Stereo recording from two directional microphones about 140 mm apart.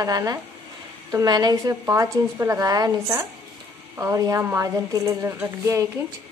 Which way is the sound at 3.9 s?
20° right (ahead or behind).